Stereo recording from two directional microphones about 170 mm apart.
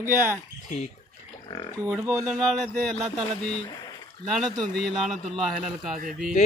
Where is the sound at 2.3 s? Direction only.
Centre (ahead or behind).